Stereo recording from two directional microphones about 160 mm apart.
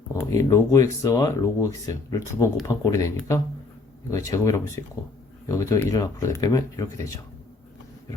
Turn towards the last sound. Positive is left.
turn(degrees=20)  # may be behind; listen again after turning